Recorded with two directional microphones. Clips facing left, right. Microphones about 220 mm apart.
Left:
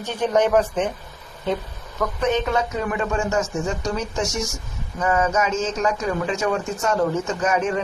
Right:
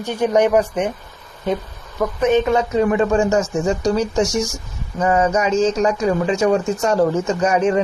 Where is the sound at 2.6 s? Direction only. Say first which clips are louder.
Right 7 dB; 30° right (ahead or behind).